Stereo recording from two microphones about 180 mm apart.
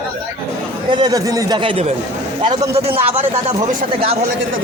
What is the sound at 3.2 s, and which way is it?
Speech, 35° right (ahead or behind).